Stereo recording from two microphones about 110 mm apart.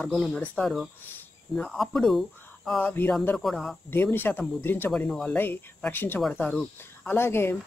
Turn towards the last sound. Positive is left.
turn(degrees=20)  # may be behind; listen again after turning